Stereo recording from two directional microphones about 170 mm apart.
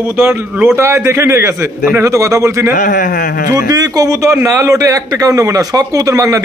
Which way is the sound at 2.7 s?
55° left (ahead or behind).